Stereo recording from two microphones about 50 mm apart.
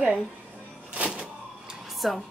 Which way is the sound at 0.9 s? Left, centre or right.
Right.